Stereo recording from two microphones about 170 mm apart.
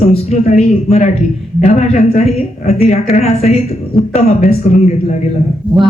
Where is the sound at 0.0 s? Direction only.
40° left (ahead or behind).